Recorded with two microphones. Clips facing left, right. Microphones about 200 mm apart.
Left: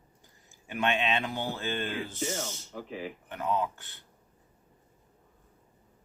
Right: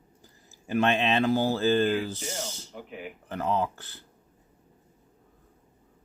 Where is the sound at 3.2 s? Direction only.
35° right (ahead or behind).